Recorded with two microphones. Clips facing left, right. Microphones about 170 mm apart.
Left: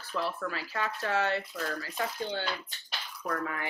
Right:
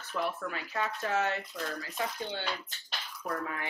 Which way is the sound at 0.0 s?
20° right (ahead or behind).